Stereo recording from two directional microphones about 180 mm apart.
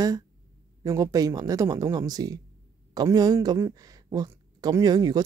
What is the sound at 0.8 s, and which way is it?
Speech, 20° right (ahead or behind).